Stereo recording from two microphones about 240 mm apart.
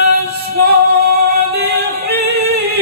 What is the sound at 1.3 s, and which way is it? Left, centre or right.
A capella, right.